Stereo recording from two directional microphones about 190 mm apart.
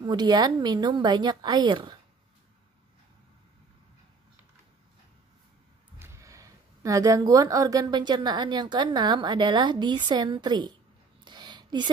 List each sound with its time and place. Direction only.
0.0 s speech: 20° right (ahead or behind)
5.9 s speech: 15° right (ahead or behind)
11.2 s a sound: 25° right (ahead or behind)